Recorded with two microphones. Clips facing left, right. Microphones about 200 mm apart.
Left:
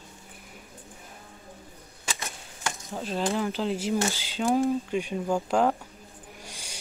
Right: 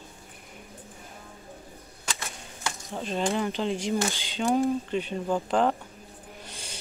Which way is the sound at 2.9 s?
Centre (ahead or behind).